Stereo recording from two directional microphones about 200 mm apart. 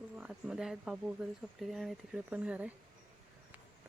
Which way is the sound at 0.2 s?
5° right (ahead or behind).